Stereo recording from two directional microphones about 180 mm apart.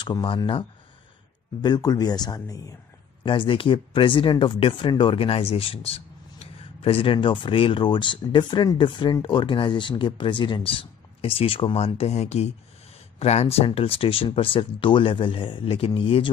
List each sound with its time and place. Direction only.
0.0 s speech: 25° left (ahead or behind)